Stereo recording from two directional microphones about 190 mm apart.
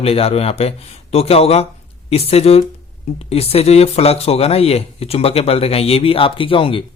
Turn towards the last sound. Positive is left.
turn(degrees=25)  # may be behind; listen again after turning